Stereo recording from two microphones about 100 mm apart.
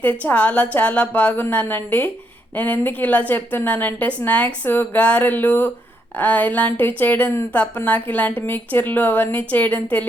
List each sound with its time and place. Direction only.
0.0 s a woman's voice: 15° left (ahead or behind)